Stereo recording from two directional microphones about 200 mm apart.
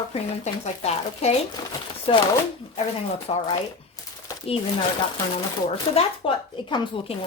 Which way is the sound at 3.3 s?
30° left (ahead or behind).